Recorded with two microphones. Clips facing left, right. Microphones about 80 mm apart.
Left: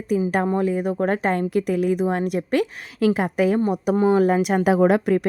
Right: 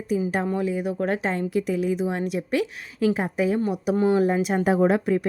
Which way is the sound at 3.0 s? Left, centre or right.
Left.